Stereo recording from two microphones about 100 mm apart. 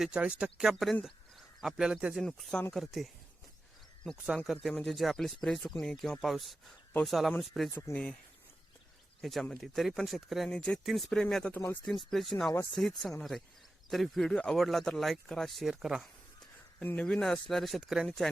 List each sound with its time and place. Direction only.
0.0 s speech: 10° right (ahead or behind)
2.2 s speech: 5° left (ahead or behind)
4.6 s speech: 5° left (ahead or behind)
7.7 s speech: 25° left (ahead or behind)
9.2 s speech: 5° left (ahead or behind)
11.5 s speech: 20° left (ahead or behind)
11.9 s speech: centre (ahead or behind)
16.8 s speech: 20° left (ahead or behind)
17.1 s speech: 5° left (ahead or behind)